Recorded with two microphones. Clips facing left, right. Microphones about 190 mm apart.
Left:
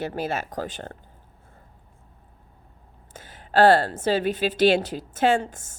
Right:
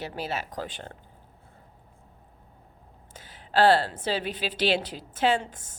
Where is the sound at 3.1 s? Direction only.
50° left (ahead or behind).